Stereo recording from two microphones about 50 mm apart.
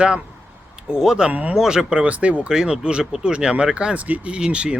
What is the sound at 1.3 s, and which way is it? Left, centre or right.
Speech, right.